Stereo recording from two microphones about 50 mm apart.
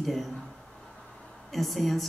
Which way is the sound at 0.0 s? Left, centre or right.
Centre.